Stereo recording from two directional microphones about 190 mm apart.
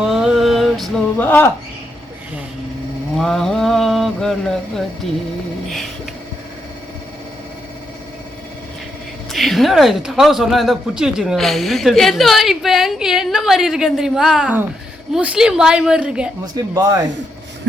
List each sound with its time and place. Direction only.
0.0 s a sound: 5° right (ahead or behind)
3.2 s speech: centre (ahead or behind)
9.3 s speech: centre (ahead or behind)
16.6 s speech: 20° right (ahead or behind)